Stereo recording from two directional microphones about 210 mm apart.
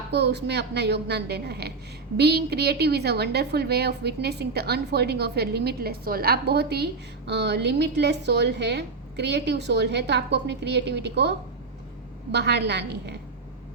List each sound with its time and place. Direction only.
0.1 s a woman's voice: 55° right (ahead or behind)